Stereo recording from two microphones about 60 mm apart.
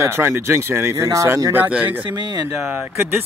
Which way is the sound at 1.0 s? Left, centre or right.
Right.